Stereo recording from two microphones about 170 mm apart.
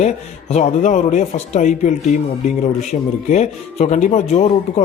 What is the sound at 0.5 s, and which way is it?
Speech, 45° left (ahead or behind).